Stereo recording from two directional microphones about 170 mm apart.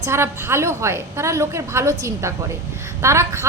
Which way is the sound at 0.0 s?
15° right (ahead or behind).